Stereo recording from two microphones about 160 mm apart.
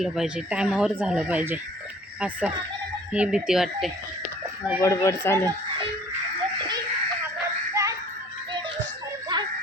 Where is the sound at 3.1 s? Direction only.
5° right (ahead or behind).